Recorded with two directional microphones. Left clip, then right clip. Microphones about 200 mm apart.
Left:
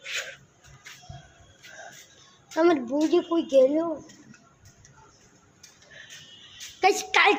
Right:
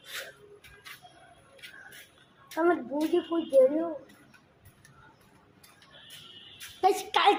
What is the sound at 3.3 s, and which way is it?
Speech, 30° left (ahead or behind).